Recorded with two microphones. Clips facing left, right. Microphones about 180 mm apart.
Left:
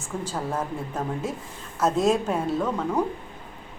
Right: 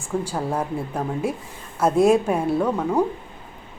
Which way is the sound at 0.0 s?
10° right (ahead or behind).